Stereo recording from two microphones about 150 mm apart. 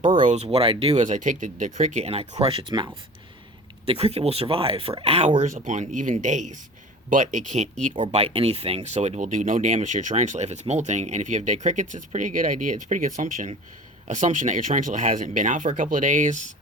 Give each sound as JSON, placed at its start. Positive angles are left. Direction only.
{"t": 0.0, "sound": "speech", "side_deg": -60}
{"t": 1.0, "sound": "speech", "side_deg": -55}
{"t": 3.8, "sound": "speech", "side_deg": -40}
{"t": 8.1, "sound": "speech", "side_deg": -40}